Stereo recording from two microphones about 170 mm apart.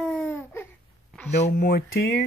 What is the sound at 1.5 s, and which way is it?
Speech, 70° left (ahead or behind).